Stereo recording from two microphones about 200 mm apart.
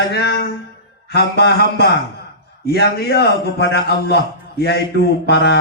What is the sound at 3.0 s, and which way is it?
A man's voice, 55° left (ahead or behind).